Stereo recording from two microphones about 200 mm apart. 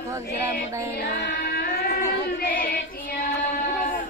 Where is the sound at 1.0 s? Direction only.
55° left (ahead or behind).